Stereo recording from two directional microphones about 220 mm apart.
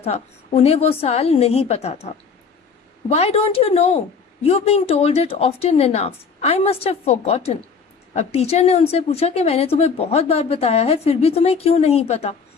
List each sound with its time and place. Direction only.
0.0 s a woman's voice: 25° left (ahead or behind)